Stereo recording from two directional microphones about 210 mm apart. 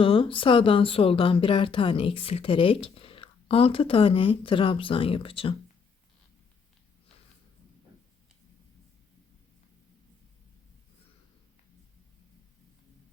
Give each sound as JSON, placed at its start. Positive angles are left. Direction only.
{"t": 0.0, "sound": "speech", "side_deg": 25}